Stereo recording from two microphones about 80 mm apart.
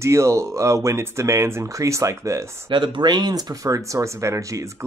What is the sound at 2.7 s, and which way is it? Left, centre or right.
Speech, right.